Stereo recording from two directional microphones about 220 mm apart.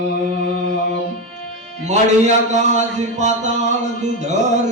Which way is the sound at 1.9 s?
35° right (ahead or behind).